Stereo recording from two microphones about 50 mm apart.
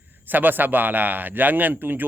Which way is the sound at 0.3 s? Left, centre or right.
Right.